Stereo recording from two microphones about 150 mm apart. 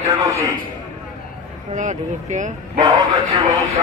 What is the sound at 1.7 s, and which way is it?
Speech, 55° right (ahead or behind).